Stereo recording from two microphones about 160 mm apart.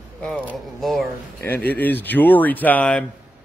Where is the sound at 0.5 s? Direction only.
Centre (ahead or behind).